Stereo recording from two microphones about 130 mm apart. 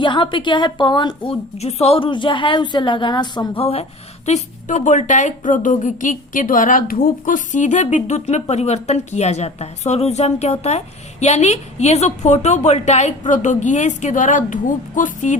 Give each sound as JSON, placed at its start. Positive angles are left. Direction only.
{"t": 0.0, "sound": "a woman's voice", "side_deg": 40}
{"t": 1.5, "sound": "a woman's voice", "side_deg": 55}
{"t": 4.3, "sound": "a woman's voice", "side_deg": 60}